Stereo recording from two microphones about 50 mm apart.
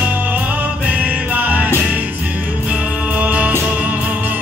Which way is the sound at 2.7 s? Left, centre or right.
Right.